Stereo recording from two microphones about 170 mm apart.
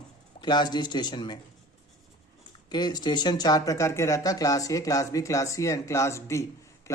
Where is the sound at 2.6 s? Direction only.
25° left (ahead or behind).